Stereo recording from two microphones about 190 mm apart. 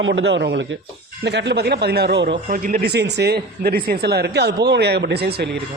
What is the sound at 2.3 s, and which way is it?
Speech, 45° right (ahead or behind).